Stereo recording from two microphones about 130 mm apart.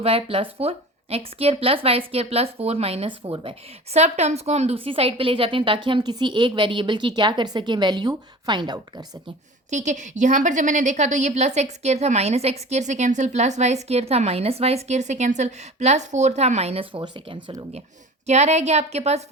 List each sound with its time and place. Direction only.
0.0 s a woman's voice: 45° right (ahead or behind)
3.9 s a woman's voice: 60° right (ahead or behind); by 9.0 s 30° right (ahead or behind)
9.6 s a woman's voice: 65° right (ahead or behind)
17.0 s a woman's voice: 40° right (ahead or behind)
18.3 s a woman's voice: 60° right (ahead or behind)